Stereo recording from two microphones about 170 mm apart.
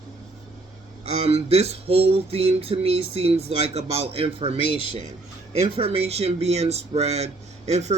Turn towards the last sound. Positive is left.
turn(degrees=-40)  # may be behind; listen again after turning